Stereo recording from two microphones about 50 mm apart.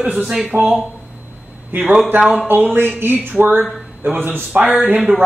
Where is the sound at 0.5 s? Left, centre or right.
Right.